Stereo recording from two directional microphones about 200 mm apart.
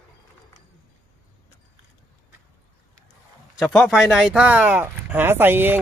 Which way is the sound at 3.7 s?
5° right (ahead or behind).